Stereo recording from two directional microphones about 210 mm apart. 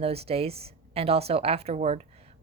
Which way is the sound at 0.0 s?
30° right (ahead or behind).